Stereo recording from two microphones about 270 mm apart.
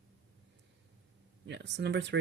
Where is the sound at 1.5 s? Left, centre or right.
Right.